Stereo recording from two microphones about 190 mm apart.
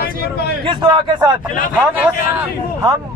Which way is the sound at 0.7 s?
25° right (ahead or behind).